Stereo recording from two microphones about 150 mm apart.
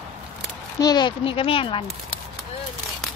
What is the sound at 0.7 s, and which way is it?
Speech, 25° left (ahead or behind).